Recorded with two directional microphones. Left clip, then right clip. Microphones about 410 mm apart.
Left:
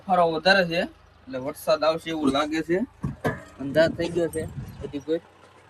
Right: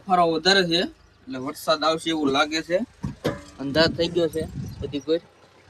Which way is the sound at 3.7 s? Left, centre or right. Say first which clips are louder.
Right 1 dB; centre.